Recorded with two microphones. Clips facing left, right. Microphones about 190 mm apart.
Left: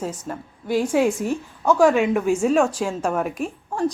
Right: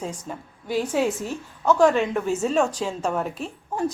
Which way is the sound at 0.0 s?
5° left (ahead or behind).